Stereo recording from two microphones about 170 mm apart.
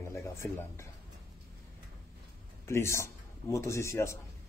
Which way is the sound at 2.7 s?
15° left (ahead or behind).